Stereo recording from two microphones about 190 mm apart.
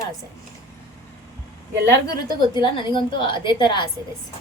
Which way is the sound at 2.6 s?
25° left (ahead or behind).